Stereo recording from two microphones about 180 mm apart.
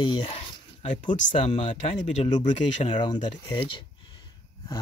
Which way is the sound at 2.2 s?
30° left (ahead or behind).